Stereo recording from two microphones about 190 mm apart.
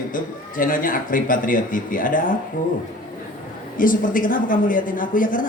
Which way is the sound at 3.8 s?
45° left (ahead or behind).